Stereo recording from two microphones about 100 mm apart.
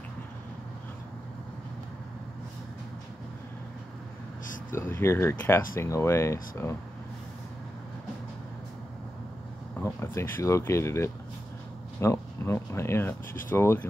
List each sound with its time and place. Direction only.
4.7 s speech: 25° left (ahead or behind)
9.9 s speech: 30° left (ahead or behind)